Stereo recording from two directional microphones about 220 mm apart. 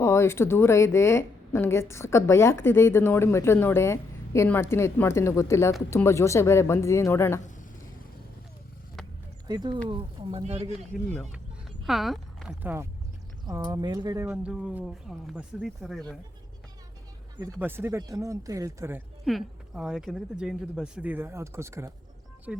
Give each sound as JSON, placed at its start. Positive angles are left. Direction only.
{"t": 0.0, "sound": "a woman's voice", "side_deg": 10}
{"t": 9.5, "sound": "speech", "side_deg": -20}
{"t": 10.7, "sound": "speech", "side_deg": 0}
{"t": 17.4, "sound": "speech", "side_deg": -10}
{"t": 19.2, "sound": "speech", "side_deg": 0}